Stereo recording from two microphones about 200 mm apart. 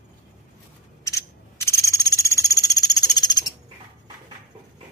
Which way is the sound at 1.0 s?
15° left (ahead or behind).